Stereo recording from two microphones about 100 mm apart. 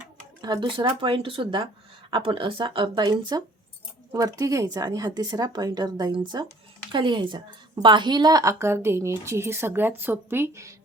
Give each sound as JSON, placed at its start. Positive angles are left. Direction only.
{"t": 0.4, "sound": "speech", "side_deg": -45}
{"t": 0.9, "sound": "a woman's voice", "side_deg": -55}